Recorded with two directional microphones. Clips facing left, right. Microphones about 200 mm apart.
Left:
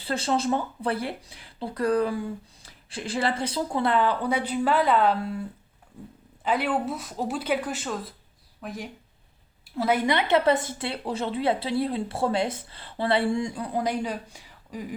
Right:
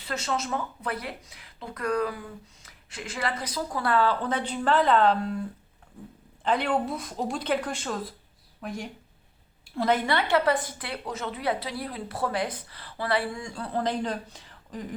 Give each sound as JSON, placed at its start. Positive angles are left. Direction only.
{"t": 0.0, "sound": "speech", "side_deg": 30}
{"t": 6.4, "sound": "speech", "side_deg": 5}